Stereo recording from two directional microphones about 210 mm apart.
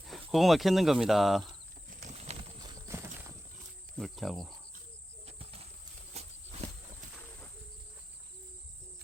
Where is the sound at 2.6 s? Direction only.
20° right (ahead or behind).